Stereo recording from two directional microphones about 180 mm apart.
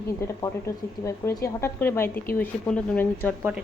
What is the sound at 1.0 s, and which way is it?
A woman's voice, 15° left (ahead or behind).